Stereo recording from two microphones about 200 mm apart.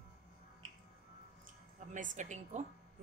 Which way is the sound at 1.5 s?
40° right (ahead or behind).